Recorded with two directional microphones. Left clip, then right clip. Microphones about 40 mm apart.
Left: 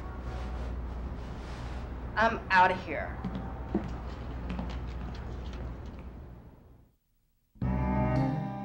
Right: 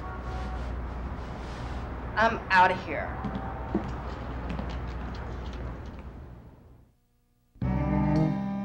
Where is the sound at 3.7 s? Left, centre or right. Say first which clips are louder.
Right 2 dB; right.